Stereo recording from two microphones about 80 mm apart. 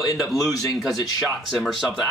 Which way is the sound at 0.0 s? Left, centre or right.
Left.